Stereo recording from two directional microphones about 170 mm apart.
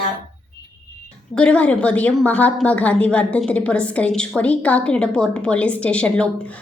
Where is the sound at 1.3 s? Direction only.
5° left (ahead or behind).